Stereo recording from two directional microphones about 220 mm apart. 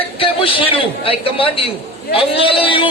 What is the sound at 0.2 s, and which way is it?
A man's voice, 25° left (ahead or behind).